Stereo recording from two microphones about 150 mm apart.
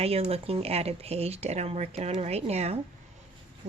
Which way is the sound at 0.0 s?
40° right (ahead or behind).